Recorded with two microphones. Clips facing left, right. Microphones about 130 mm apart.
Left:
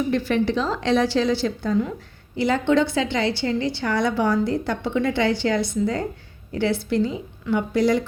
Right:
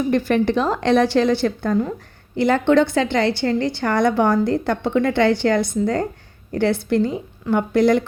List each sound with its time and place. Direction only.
0.1 s a woman's voice: 50° right (ahead or behind)